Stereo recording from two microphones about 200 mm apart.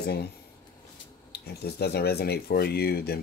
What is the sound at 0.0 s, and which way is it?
Speech, 55° left (ahead or behind).